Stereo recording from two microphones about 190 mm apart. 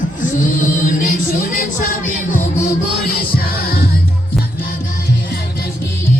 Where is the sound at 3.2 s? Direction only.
50° left (ahead or behind).